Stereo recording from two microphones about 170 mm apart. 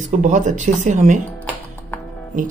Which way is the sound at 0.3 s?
45° right (ahead or behind).